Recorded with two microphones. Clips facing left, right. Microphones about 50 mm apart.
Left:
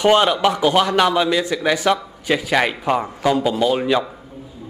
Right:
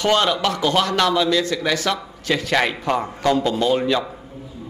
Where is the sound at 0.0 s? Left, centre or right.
Centre.